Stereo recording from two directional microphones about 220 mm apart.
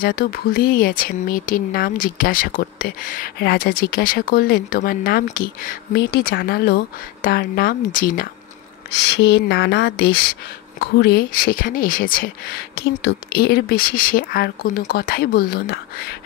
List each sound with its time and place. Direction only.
0.0 s speech: 45° left (ahead or behind)
8.9 s speech: 50° left (ahead or behind)